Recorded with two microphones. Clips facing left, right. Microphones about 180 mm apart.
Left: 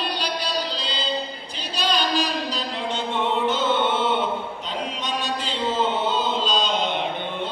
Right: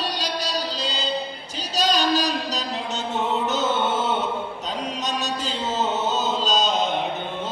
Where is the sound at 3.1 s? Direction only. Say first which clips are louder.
Left 1 dB; 45° right (ahead or behind).